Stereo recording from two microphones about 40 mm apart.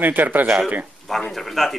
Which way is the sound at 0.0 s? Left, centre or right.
Right.